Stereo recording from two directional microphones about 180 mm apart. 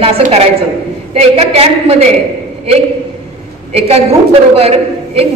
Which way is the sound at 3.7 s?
35° right (ahead or behind).